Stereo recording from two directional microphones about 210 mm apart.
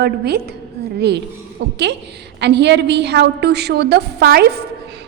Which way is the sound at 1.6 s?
50° right (ahead or behind).